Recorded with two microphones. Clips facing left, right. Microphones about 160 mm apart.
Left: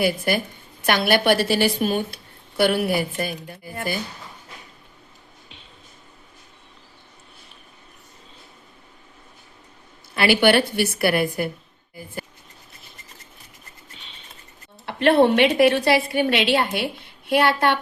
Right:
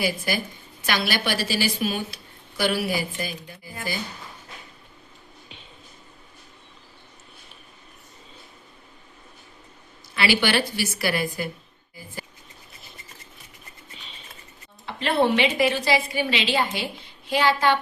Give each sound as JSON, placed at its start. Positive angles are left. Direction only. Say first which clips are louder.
{"t": 0.0, "sound": "a woman's voice", "louder": "left 5 dB", "side_deg": 55}
{"t": 10.2, "sound": "a woman's voice", "louder": "left 5 dB", "side_deg": 55}
{"t": 13.9, "sound": "a sound", "louder": "right 1 dB", "side_deg": 0}
{"t": 14.8, "sound": "a woman's voice", "louder": "left 6 dB", "side_deg": 65}